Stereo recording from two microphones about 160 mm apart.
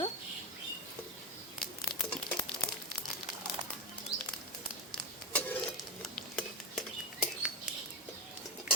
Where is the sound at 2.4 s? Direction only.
15° left (ahead or behind).